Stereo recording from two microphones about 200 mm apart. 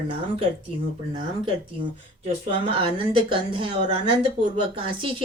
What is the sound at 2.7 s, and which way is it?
Speech, 25° right (ahead or behind).